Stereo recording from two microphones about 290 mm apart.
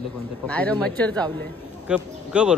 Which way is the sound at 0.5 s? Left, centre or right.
Centre.